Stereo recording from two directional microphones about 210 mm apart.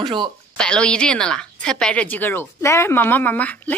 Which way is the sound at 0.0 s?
20° right (ahead or behind).